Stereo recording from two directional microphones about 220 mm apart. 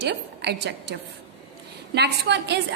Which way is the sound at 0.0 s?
50° right (ahead or behind).